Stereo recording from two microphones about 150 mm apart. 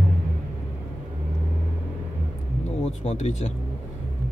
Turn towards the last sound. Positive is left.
turn(degrees=50)  # may be behind; listen again after turning